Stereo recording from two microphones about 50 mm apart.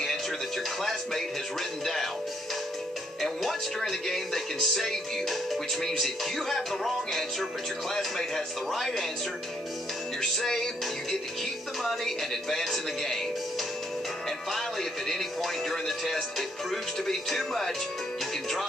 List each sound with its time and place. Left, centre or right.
3.2 s speech: centre
8.7 s speech: centre
10.2 s music: centre
11.8 s speech: centre
14.5 s speech: centre